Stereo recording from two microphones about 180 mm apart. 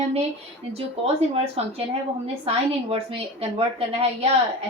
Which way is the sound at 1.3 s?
35° right (ahead or behind).